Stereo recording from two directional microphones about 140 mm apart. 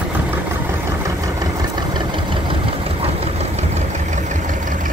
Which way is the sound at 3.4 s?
55° right (ahead or behind).